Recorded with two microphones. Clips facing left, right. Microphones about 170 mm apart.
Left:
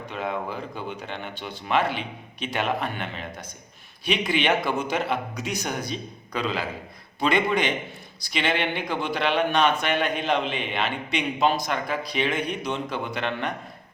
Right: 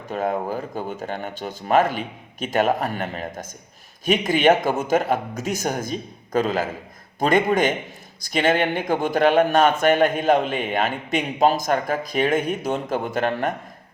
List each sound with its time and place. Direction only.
0.1 s a man's voice: 45° right (ahead or behind)